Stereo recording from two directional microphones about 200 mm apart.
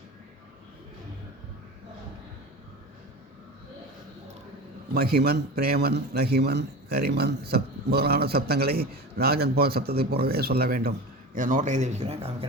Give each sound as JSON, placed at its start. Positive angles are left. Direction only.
{"t": 4.9, "sound": "a man's voice", "side_deg": -50}